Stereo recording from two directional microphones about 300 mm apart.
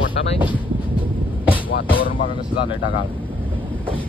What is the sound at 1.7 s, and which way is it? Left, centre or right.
Music, left.